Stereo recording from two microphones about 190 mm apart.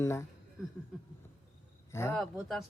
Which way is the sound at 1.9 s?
15° left (ahead or behind).